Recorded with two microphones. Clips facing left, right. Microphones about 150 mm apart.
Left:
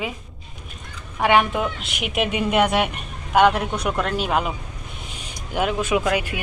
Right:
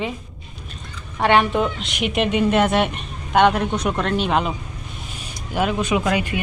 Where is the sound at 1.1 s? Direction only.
10° left (ahead or behind).